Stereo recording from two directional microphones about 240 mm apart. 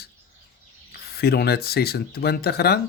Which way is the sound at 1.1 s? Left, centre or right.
Left.